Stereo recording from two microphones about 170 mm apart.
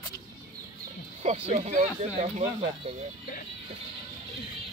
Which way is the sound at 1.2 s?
40° right (ahead or behind).